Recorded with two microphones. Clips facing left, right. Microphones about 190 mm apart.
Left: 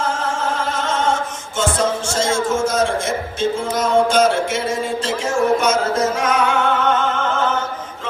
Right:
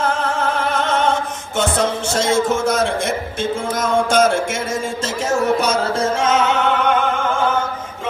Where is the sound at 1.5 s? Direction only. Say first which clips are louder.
Even; 60° right (ahead or behind).